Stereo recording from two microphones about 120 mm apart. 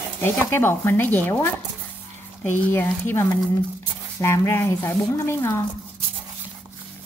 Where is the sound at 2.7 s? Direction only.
20° left (ahead or behind).